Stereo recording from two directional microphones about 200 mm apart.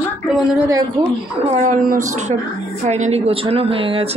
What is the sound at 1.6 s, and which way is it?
A woman's voice, 40° right (ahead or behind).